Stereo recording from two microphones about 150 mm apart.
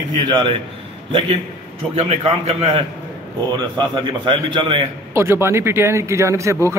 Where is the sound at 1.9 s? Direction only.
40° right (ahead or behind).